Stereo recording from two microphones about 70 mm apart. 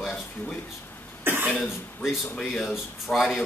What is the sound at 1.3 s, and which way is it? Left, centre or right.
Speech, right.